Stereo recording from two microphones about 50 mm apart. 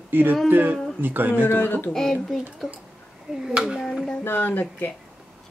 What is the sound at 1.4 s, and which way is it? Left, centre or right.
Speech, left.